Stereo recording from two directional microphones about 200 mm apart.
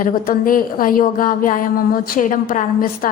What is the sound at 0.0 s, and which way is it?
A woman's voice, 45° left (ahead or behind).